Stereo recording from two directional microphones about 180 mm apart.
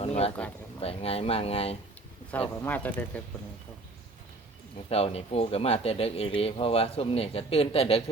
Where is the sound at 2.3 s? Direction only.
10° left (ahead or behind).